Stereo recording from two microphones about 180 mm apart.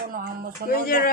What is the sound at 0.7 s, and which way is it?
Speech, 55° left (ahead or behind).